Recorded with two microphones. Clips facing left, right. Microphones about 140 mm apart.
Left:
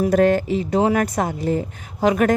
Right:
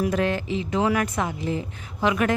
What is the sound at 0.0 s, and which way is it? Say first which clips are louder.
Speech: left 7 dB; 45° left (ahead or behind).